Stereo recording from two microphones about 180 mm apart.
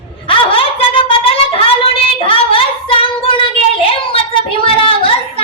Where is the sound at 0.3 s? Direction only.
30° left (ahead or behind).